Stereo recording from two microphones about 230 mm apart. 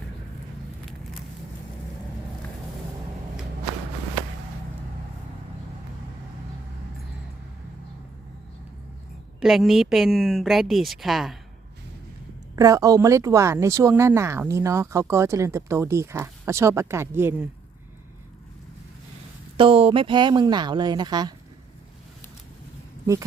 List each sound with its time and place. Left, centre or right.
9.4 s speech: centre
12.5 s speech: centre
19.5 s speech: right